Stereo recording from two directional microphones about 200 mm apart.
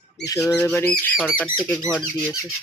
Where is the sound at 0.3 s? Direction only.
15° left (ahead or behind).